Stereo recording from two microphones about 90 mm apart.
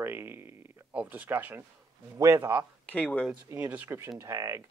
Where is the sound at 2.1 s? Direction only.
35° right (ahead or behind).